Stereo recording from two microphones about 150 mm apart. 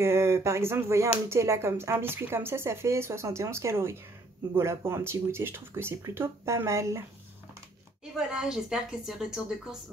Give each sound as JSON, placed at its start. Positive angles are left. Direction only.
{"t": 0.0, "sound": "speech", "side_deg": -20}
{"t": 8.0, "sound": "a woman's voice", "side_deg": -5}